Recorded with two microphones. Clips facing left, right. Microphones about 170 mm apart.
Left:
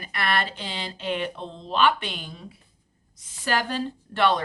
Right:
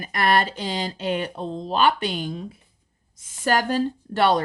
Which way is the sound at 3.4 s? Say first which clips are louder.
Right 5 dB; 45° right (ahead or behind).